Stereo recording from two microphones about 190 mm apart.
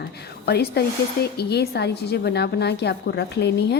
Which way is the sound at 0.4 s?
60° left (ahead or behind).